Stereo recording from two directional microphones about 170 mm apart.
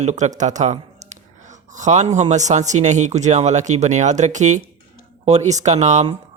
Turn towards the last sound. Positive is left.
turn(degrees=-45)  # may be behind; listen again after turning